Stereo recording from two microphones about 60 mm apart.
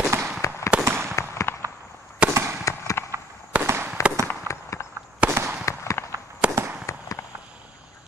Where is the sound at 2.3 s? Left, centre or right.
Right.